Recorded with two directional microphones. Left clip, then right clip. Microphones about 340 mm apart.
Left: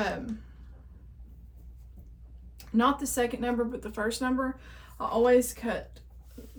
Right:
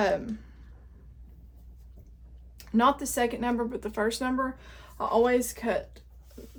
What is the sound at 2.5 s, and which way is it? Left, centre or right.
Speech, right.